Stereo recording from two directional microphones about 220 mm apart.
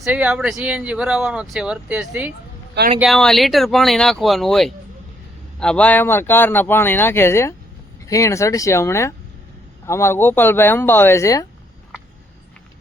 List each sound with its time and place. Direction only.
0.0 s speech: 5° right (ahead or behind); by 11.4 s 15° left (ahead or behind)